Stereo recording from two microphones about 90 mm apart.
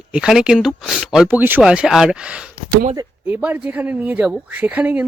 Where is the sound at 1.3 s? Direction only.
20° right (ahead or behind).